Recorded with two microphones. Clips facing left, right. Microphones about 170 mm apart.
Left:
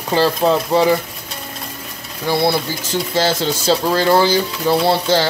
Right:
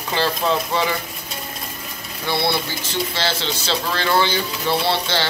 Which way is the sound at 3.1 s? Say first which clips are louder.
Left 7 dB; 45° left (ahead or behind).